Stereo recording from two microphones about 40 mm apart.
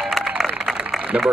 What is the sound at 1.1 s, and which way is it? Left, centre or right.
Speech, right.